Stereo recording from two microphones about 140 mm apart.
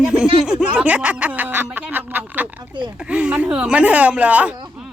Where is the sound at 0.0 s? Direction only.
5° right (ahead or behind).